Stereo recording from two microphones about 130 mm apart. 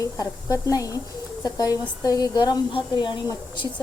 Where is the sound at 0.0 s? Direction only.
25° left (ahead or behind).